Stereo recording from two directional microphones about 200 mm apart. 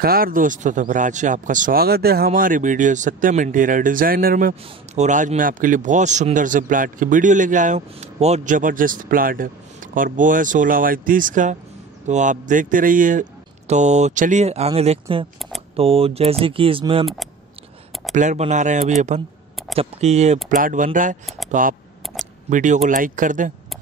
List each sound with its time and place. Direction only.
0.0 s speech: 45° right (ahead or behind); by 17.1 s 25° right (ahead or behind)
18.1 s speech: 35° right (ahead or behind)